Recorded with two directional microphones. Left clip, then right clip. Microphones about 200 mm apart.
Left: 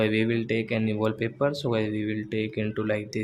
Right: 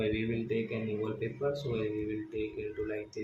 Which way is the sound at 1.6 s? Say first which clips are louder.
Left 7 dB; 50° left (ahead or behind).